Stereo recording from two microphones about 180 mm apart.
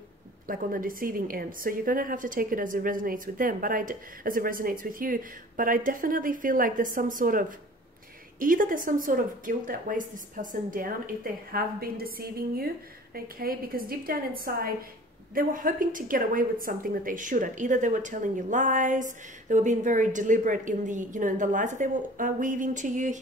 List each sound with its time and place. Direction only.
0.5 s a woman's voice: 50° right (ahead or behind)